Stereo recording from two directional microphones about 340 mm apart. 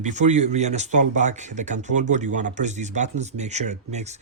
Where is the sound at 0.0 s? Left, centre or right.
Right.